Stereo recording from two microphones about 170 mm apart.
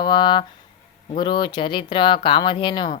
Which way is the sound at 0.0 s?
25° left (ahead or behind).